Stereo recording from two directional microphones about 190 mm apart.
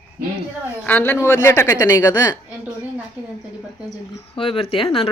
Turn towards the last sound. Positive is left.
turn(degrees=30)  # may be behind; listen again after turning